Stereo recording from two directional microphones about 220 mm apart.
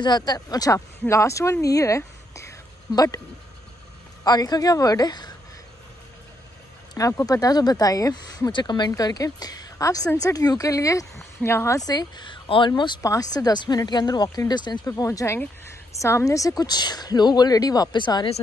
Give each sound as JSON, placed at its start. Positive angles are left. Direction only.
{"t": 0.0, "sound": "speech", "side_deg": 20}
{"t": 4.2, "sound": "speech", "side_deg": 15}
{"t": 7.0, "sound": "speech", "side_deg": 15}